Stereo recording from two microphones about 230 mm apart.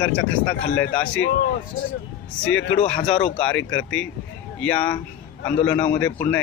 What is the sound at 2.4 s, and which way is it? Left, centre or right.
Speech, left.